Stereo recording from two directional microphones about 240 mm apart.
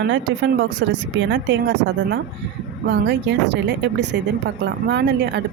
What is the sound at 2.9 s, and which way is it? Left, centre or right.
Speech, right.